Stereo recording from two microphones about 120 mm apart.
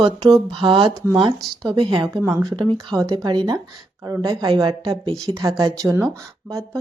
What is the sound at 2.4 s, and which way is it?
Speech, 40° right (ahead or behind).